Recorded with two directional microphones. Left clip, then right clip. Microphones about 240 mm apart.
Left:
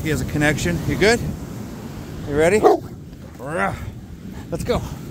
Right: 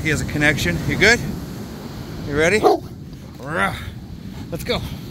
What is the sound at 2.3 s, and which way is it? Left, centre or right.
Speech, centre.